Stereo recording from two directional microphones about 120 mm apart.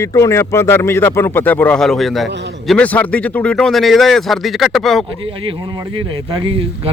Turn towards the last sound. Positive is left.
turn(degrees=-50)  # may be behind; listen again after turning